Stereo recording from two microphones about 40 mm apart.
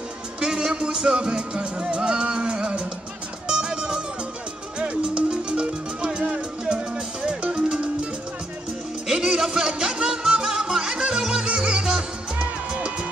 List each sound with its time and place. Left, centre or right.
0.4 s music: right